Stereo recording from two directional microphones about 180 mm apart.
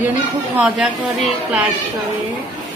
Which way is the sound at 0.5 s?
5° right (ahead or behind).